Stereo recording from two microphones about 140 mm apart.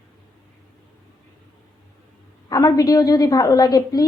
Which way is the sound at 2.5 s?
25° left (ahead or behind).